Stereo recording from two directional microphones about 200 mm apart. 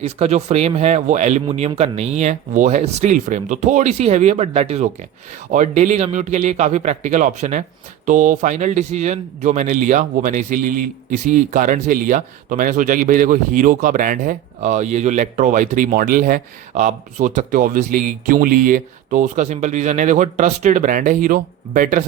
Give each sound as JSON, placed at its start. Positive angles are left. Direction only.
{"t": 0.0, "sound": "a man's voice", "side_deg": -30}